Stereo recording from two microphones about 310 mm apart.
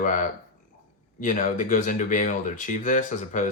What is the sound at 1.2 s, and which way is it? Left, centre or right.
Speech, left.